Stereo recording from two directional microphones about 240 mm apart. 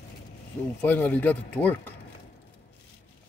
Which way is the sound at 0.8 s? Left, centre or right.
Centre.